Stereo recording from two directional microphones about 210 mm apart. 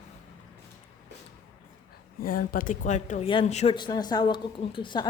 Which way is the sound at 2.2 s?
45° left (ahead or behind).